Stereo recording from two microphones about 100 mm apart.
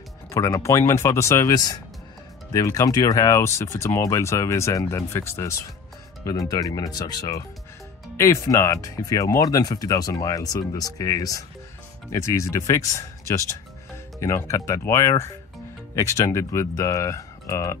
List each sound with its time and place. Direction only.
0.3 s speech: 30° left (ahead or behind)
8.2 s speech: 30° left (ahead or behind)